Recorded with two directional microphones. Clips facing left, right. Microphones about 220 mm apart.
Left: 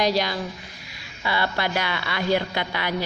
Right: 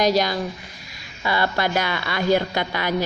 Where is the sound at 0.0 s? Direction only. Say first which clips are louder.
Right 3 dB; 45° right (ahead or behind).